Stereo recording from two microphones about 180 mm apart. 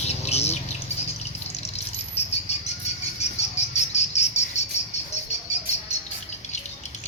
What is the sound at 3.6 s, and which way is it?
Cricket, 40° left (ahead or behind).